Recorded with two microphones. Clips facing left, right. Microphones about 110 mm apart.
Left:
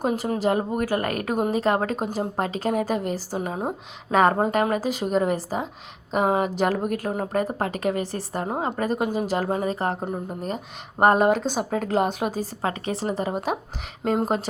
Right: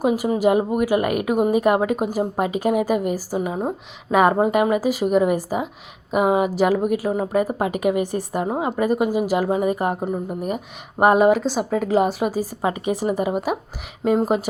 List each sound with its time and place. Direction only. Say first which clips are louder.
0.0 s a woman's voice: right 5 dB; 5° right (ahead or behind)